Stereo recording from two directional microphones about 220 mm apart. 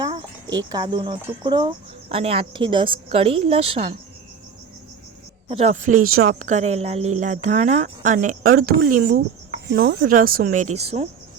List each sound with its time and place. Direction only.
0.0 s wind chime: 20° right (ahead or behind)
0.7 s speech: 20° right (ahead or behind)
5.5 s speech: 30° right (ahead or behind)